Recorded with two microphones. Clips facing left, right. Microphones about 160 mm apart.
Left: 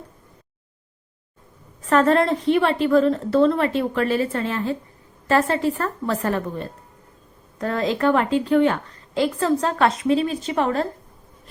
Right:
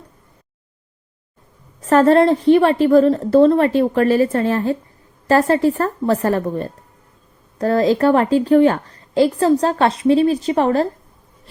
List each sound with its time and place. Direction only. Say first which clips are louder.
1.8 s a woman's voice: right 5 dB; 40° right (ahead or behind)